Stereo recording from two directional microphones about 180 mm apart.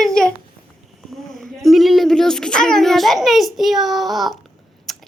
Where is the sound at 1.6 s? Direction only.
Centre (ahead or behind).